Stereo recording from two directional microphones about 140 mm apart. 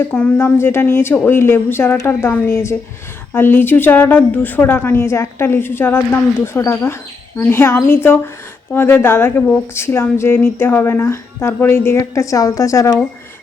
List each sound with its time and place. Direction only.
0.1 s a woman's voice: 15° left (ahead or behind)